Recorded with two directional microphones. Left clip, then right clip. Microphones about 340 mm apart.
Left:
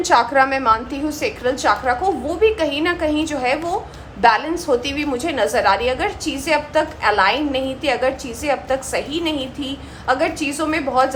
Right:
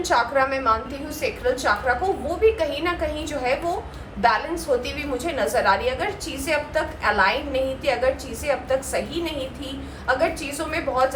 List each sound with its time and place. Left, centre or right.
0.0 s a woman's voice: left